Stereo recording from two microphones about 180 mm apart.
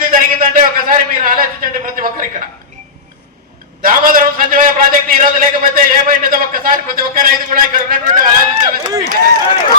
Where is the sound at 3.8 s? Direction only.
50° right (ahead or behind).